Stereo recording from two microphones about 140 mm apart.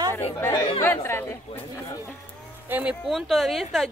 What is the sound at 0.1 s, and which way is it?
Speech, 15° left (ahead or behind).